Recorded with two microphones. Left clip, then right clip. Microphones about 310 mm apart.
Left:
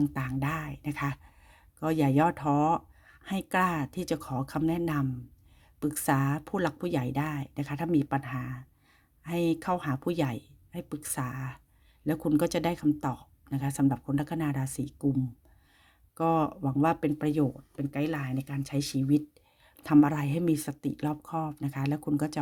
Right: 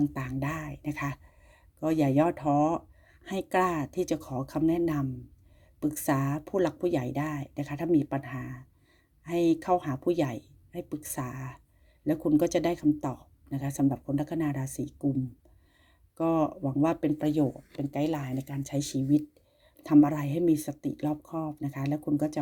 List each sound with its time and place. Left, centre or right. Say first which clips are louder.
0.0 s speech: even; left
16.1 s speech: even; left
18.1 s speech: right 1 dB; left
18.6 s speech: even; left